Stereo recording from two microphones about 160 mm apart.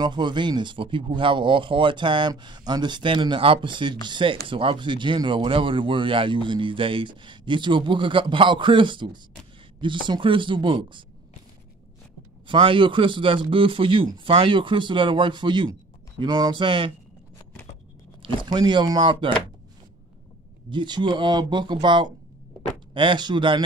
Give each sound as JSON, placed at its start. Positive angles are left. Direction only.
{"t": 0.0, "sound": "speech", "side_deg": -30}
{"t": 12.4, "sound": "speech", "side_deg": -30}
{"t": 18.2, "sound": "speech", "side_deg": -30}
{"t": 20.7, "sound": "speech", "side_deg": -30}